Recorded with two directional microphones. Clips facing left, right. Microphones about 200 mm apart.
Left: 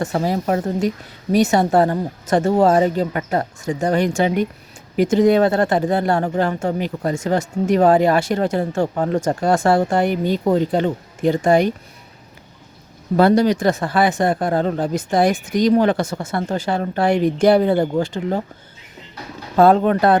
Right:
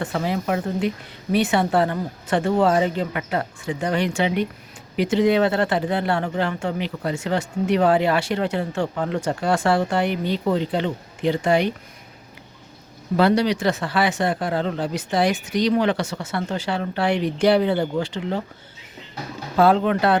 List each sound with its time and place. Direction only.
0.0 s a woman's voice: 40° left (ahead or behind)
13.1 s speech: 45° left (ahead or behind)
19.5 s speech: 45° left (ahead or behind)